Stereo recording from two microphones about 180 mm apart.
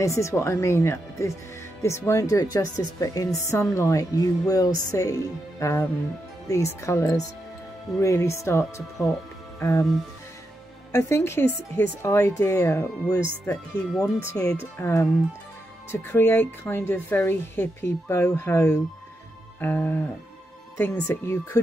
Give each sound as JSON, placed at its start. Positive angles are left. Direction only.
{"t": 0.0, "sound": "speech", "side_deg": 15}
{"t": 4.5, "sound": "music", "side_deg": 20}
{"t": 4.9, "sound": "speech", "side_deg": 20}
{"t": 10.9, "sound": "speech", "side_deg": 15}